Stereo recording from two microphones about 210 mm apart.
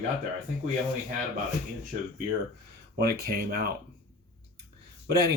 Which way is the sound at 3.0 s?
45° right (ahead or behind).